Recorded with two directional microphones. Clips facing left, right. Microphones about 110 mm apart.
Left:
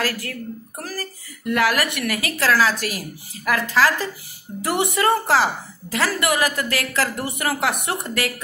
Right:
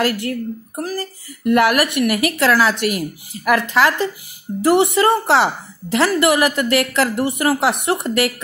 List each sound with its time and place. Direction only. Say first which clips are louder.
0.0 s a woman's voice: right 6 dB; 25° right (ahead or behind)